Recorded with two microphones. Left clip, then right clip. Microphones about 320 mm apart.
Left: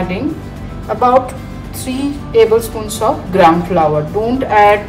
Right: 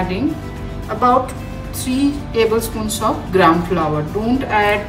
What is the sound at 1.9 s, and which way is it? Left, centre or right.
A woman's voice, centre.